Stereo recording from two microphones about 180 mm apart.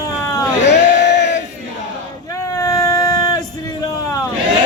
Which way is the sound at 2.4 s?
20° left (ahead or behind).